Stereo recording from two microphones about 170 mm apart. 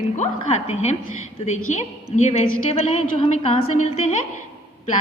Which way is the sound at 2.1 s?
40° left (ahead or behind).